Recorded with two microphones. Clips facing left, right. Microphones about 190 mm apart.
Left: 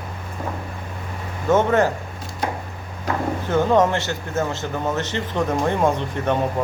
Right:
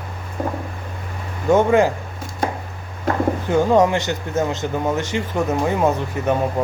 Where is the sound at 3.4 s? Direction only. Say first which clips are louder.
Right 1 dB; 15° right (ahead or behind).